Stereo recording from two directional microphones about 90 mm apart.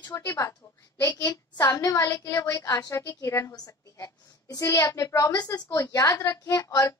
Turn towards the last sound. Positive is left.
turn(degrees=35)  # may be behind; listen again after turning